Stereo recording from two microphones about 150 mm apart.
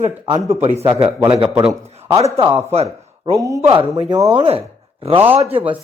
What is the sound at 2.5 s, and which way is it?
Speech, 45° right (ahead or behind).